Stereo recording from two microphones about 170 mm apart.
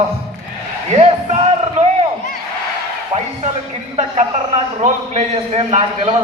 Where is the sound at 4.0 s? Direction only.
45° right (ahead or behind).